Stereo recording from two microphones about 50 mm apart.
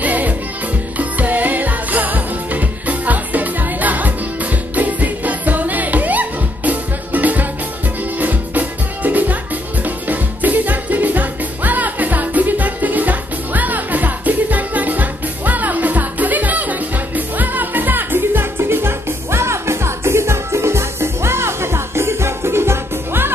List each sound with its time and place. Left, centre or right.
0.0 s music: right